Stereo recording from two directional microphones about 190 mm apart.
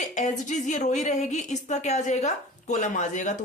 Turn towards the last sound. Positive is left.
turn(degrees=40)  # may be behind; listen again after turning